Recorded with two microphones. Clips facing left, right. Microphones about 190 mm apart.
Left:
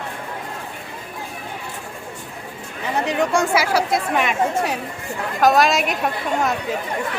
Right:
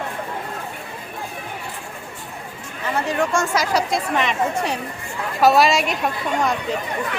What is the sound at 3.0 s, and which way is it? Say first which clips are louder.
A woman's voice: left 2 dB; 15° left (ahead or behind).